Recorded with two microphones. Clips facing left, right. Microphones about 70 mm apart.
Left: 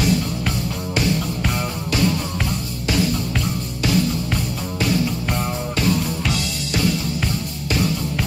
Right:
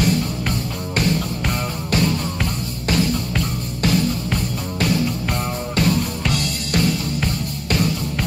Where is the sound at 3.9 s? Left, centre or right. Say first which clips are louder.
Even; centre.